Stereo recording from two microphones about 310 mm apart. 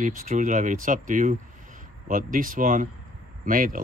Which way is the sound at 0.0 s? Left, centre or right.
Right.